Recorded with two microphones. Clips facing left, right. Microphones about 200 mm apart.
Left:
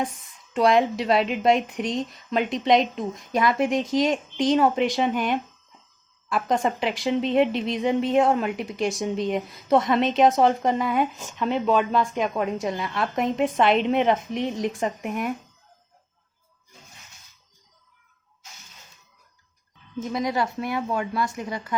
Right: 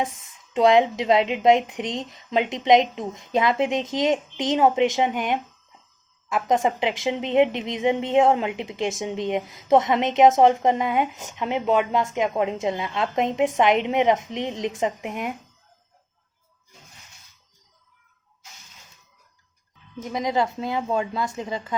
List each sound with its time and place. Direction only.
0.5 s a woman's voice: 20° right (ahead or behind)
20.1 s a woman's voice: 20° right (ahead or behind)